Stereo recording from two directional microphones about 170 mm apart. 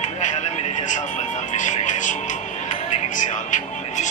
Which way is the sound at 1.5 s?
45° left (ahead or behind).